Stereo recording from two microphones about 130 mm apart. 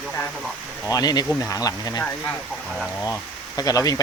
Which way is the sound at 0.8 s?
30° left (ahead or behind).